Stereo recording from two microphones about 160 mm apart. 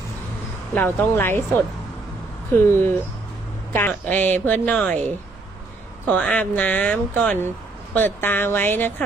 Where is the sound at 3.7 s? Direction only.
10° left (ahead or behind).